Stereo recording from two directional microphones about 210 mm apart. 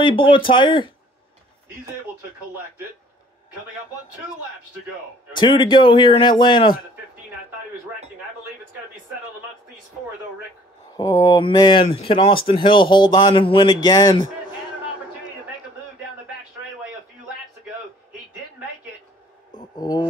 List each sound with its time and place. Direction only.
0.0 s speech: 25° left (ahead or behind)
5.3 s speech: 20° left (ahead or behind)
11.0 s speech: 15° left (ahead or behind)
19.5 s a sound: 20° left (ahead or behind)